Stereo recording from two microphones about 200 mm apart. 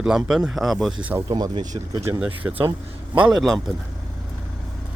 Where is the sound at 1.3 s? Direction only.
20° right (ahead or behind).